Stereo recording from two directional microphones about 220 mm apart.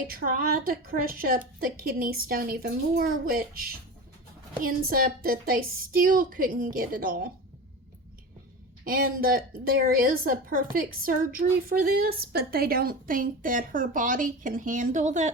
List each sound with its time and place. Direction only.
0.1 s a woman's voice: 40° right (ahead or behind)
4.6 s a woman's voice: 40° right (ahead or behind)
8.8 s a woman's voice: 40° right (ahead or behind)